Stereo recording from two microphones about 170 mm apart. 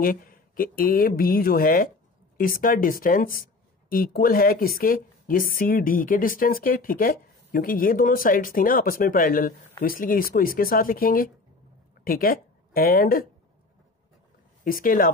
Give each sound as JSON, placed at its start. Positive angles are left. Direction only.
{"t": 0.0, "sound": "a woman's voice", "side_deg": 55}
{"t": 14.6, "sound": "speech", "side_deg": 55}